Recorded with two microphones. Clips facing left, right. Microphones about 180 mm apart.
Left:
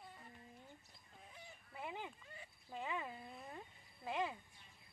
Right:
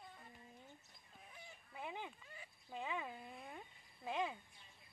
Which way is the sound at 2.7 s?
10° right (ahead or behind).